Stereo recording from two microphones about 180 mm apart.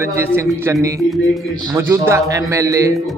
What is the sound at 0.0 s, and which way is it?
A man's voice, 15° right (ahead or behind).